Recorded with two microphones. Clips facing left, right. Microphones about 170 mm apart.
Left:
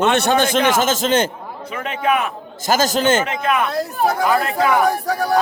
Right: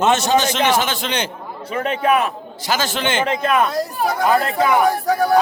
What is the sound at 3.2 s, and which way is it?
Speech, 30° right (ahead or behind).